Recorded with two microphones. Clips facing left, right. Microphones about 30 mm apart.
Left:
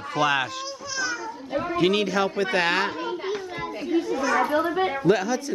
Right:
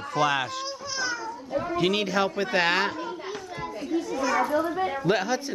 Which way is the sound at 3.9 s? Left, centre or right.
Left.